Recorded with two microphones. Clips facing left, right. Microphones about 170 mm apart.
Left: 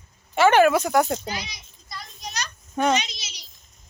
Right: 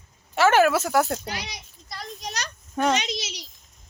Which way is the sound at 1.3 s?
70° right (ahead or behind).